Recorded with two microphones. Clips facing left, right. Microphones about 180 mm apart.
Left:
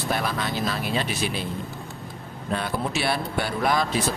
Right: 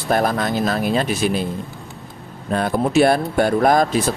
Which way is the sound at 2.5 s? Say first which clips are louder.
Right 12 dB; 45° right (ahead or behind).